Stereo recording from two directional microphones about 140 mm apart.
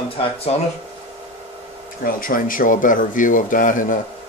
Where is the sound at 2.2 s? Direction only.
80° left.